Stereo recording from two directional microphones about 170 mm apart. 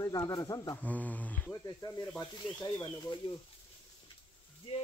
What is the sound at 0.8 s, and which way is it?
Speech, 10° left (ahead or behind).